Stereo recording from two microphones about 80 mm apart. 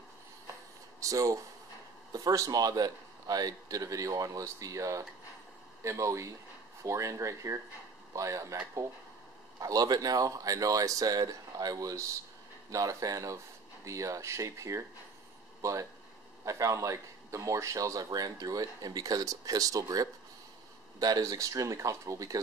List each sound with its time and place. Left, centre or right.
1.0 s a man's voice: right
9.6 s a man's voice: right